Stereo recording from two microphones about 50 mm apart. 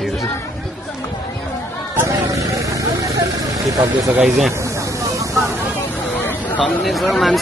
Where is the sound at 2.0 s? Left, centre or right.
Right.